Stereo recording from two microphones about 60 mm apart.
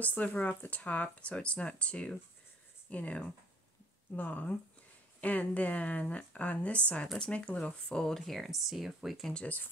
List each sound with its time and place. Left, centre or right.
0.0 s speech: left; by 8.4 s centre
8.4 s speech: centre
9.3 s speech: centre